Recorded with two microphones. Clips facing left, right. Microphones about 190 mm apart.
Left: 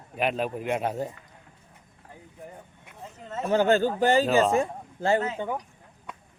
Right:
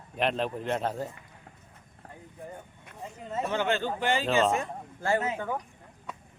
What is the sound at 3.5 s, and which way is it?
Speech, 40° left (ahead or behind).